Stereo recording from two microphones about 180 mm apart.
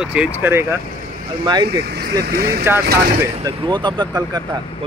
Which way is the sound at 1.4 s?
25° right (ahead or behind).